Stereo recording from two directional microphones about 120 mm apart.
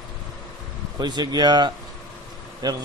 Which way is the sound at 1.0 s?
35° right (ahead or behind).